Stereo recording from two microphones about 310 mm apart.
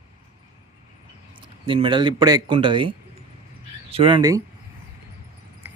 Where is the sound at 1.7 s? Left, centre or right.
Centre.